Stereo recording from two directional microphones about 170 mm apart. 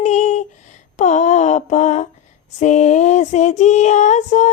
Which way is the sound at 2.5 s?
45° left (ahead or behind).